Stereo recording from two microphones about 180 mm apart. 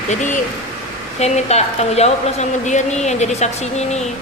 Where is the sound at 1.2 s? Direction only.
35° left (ahead or behind).